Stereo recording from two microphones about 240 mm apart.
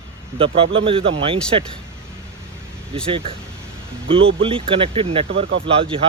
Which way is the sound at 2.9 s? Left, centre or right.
Right.